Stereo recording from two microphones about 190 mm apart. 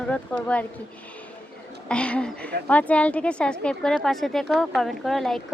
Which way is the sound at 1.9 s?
5° left (ahead or behind).